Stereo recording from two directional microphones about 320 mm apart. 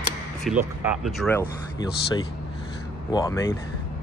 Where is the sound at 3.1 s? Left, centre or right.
Centre.